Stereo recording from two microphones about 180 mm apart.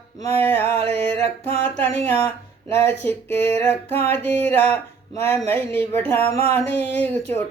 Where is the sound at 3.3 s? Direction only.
35° right (ahead or behind).